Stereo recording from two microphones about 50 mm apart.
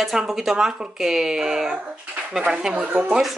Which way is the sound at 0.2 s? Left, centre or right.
Centre.